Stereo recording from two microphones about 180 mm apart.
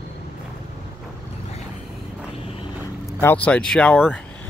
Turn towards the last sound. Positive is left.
turn(degrees=5)  # may be behind; listen again after turning